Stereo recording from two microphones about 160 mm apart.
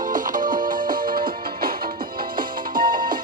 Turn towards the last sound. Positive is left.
turn(degrees=-30)  # may be behind; listen again after turning